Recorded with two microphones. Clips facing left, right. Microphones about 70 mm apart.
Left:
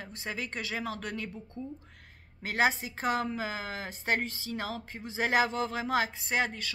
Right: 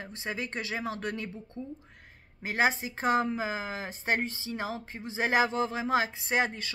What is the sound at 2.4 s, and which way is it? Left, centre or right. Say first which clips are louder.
Speech: right 1 dB; right.